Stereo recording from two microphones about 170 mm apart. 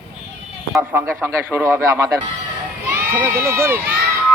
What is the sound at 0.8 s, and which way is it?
Speech, 10° right (ahead or behind).